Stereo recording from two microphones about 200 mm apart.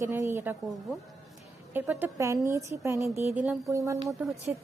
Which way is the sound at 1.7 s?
10° right (ahead or behind).